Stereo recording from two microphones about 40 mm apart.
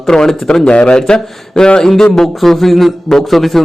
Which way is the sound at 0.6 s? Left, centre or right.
Left.